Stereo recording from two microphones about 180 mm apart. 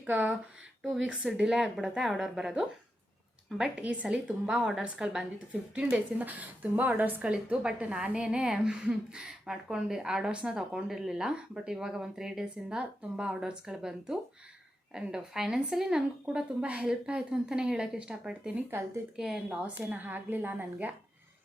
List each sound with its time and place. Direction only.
0.0 s a woman's voice: 10° right (ahead or behind)